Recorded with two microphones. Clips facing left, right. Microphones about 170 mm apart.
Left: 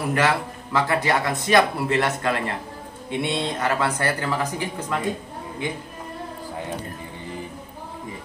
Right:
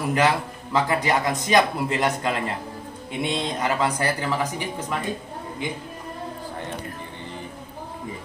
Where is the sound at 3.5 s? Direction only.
15° right (ahead or behind).